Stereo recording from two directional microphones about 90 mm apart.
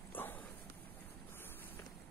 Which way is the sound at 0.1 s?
20° left (ahead or behind).